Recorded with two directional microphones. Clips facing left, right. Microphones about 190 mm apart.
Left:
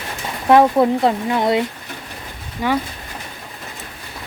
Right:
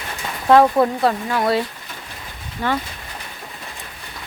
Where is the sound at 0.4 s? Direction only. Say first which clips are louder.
Left 1 dB; 20° left (ahead or behind).